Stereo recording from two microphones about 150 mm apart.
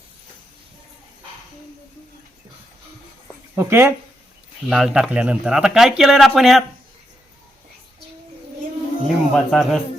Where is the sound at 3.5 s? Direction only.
15° right (ahead or behind).